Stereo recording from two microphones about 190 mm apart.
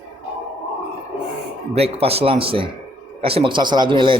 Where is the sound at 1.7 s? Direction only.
30° right (ahead or behind).